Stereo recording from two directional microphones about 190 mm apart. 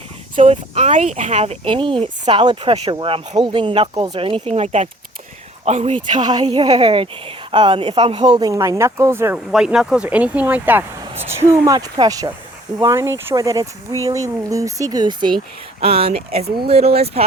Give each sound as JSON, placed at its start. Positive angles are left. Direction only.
{"t": 0.3, "sound": "speech", "side_deg": -35}
{"t": 6.1, "sound": "speech", "side_deg": -20}
{"t": 9.5, "sound": "speech", "side_deg": -5}